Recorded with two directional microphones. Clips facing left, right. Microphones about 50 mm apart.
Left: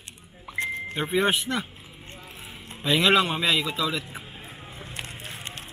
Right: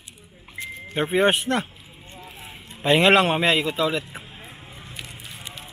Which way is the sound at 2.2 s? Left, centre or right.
Right.